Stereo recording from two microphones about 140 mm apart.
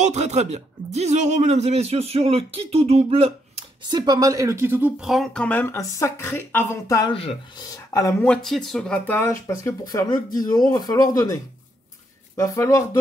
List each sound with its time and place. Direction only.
0.0 s speech: 55° right (ahead or behind)
3.9 s a woman's voice: 30° right (ahead or behind); by 5.0 s 15° right (ahead or behind)
5.0 s speech: centre (ahead or behind); by 7.1 s 20° left (ahead or behind)
7.1 s speech: 40° left (ahead or behind)
7.5 s speech: 25° left (ahead or behind)
8.3 s speech: 5° left (ahead or behind); by 11.3 s 25° left (ahead or behind)
12.4 s speech: 20° left (ahead or behind)